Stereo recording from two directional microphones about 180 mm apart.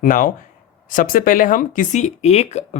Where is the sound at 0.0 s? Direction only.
50° left (ahead or behind).